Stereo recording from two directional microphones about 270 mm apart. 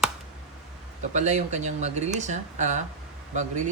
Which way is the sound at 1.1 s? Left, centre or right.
Right.